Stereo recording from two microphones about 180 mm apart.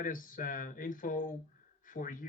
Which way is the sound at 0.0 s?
50° left (ahead or behind).